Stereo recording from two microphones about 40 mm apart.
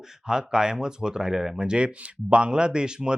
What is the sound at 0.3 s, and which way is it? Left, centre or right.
Speech, centre.